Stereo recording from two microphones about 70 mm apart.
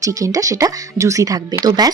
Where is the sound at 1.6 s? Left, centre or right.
Right.